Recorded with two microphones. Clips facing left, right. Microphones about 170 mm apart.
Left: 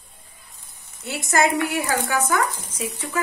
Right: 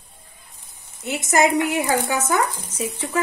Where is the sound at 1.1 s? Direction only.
20° right (ahead or behind).